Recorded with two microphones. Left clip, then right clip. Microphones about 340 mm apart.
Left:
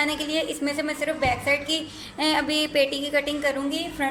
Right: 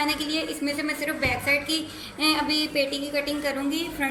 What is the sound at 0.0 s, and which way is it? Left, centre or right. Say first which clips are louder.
A woman's voice: left 1 dB; left.